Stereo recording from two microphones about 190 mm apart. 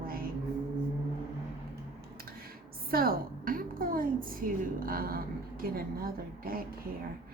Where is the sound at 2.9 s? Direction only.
50° right (ahead or behind).